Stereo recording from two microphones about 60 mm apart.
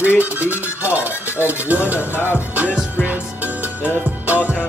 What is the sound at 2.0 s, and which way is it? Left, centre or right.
Music, left.